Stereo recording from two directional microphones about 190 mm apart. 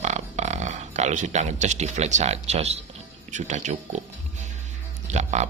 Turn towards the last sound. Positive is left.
turn(degrees=-35)  # may be behind; listen again after turning